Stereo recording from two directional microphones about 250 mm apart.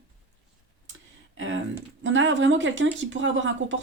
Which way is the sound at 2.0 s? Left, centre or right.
Right.